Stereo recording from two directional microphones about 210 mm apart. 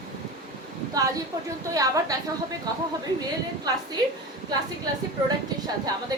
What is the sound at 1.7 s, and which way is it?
Speech, 15° right (ahead or behind).